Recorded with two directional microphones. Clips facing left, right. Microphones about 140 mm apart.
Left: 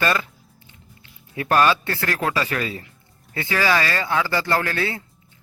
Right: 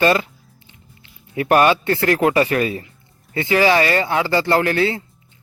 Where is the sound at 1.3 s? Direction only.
20° right (ahead or behind).